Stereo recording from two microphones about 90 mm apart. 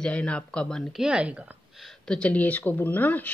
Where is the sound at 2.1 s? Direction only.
15° left (ahead or behind).